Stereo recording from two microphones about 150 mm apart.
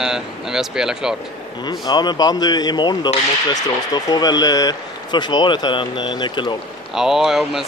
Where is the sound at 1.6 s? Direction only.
30° left (ahead or behind).